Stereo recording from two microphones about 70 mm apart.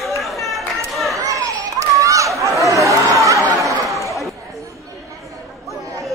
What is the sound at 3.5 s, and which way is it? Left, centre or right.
Chatter, right.